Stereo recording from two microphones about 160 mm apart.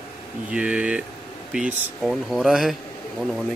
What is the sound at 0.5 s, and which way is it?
Speech, 5° right (ahead or behind).